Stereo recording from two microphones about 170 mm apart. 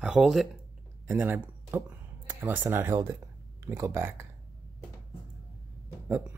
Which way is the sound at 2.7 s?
15° right (ahead or behind).